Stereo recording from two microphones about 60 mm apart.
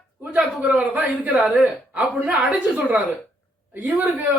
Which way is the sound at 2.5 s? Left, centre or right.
Right.